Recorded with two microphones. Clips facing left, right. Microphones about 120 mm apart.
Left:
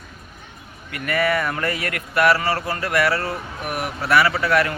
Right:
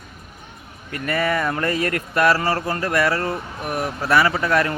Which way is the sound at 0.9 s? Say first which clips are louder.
Left 1 dB; 30° right (ahead or behind).